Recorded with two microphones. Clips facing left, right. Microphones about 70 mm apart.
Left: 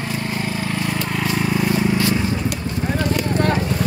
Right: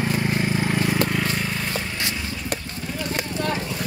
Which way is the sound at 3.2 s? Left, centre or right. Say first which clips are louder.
Left 8 dB; left.